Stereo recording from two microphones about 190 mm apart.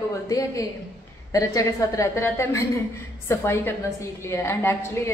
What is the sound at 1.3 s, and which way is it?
A woman's voice, 15° left (ahead or behind).